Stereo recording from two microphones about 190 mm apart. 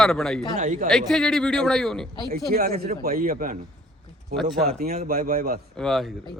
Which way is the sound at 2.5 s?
50° right (ahead or behind).